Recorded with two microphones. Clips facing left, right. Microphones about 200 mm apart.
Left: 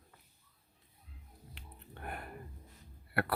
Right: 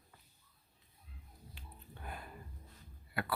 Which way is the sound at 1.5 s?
60° left (ahead or behind).